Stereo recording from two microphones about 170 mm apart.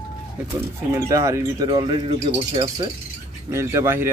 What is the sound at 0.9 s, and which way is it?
Speech, 20° right (ahead or behind).